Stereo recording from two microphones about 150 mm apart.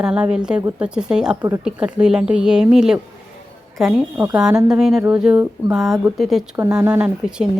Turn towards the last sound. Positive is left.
turn(degrees=-5)  # may be behind; listen again after turning